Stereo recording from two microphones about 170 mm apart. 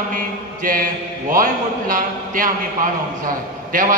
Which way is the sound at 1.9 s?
55° right (ahead or behind).